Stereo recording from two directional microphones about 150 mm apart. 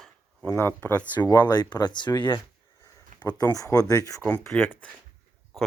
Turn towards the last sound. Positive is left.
turn(degrees=15)  # may be behind; listen again after turning